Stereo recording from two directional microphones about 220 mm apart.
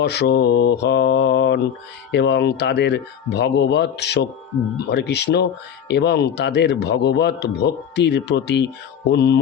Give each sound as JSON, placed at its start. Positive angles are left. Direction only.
{"t": 0.0, "sound": "a man's voice", "side_deg": 50}